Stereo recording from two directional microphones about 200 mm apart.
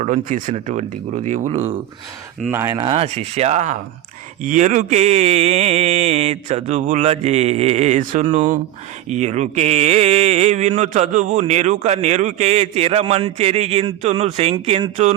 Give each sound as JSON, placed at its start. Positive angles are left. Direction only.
{"t": 0.0, "sound": "speech", "side_deg": -40}
{"t": 2.5, "sound": "speech", "side_deg": -15}
{"t": 2.8, "sound": "speech", "side_deg": -30}